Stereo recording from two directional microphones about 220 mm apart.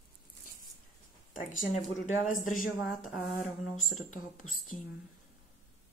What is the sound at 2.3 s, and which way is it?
Speech, 35° left (ahead or behind).